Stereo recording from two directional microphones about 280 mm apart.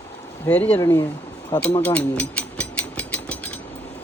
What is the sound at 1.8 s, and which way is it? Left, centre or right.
Mechanisms, centre.